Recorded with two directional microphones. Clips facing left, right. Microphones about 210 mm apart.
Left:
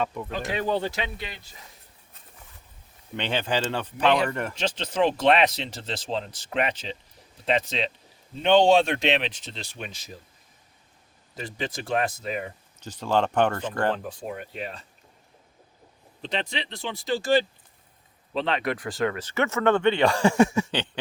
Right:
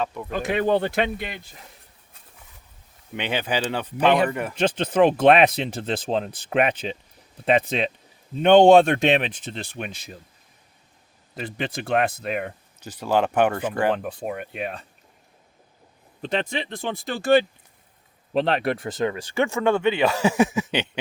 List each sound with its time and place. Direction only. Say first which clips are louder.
0.3 s speech: right 9 dB; 55° right (ahead or behind)
3.2 s speech: right 1 dB; 10° right (ahead or behind)
4.5 s speech: right 6 dB; 55° right (ahead or behind)
11.3 s speech: right 3 dB; 60° right (ahead or behind)
12.8 s speech: right 2 dB; 10° right (ahead or behind)
13.9 s speech: right 5 dB; 60° right (ahead or behind)
16.2 s speech: right 5 dB; 50° right (ahead or behind)
18.5 s speech: right 3 dB; 30° right (ahead or behind); by 20.7 s 5° right (ahead or behind)
20.7 s a sound: right 3 dB; 20° right (ahead or behind)